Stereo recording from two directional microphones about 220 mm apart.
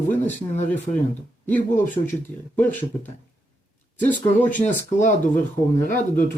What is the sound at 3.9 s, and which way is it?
Speech, 10° left (ahead or behind).